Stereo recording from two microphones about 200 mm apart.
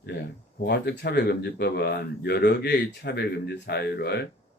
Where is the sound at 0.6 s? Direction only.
55° left (ahead or behind).